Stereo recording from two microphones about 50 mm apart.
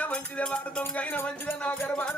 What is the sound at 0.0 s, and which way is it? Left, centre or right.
Music, left.